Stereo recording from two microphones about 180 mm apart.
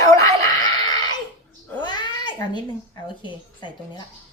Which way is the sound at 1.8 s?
25° left (ahead or behind).